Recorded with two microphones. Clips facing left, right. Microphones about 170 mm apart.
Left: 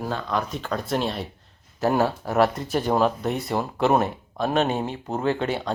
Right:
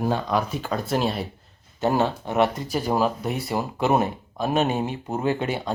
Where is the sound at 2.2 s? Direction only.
20° right (ahead or behind).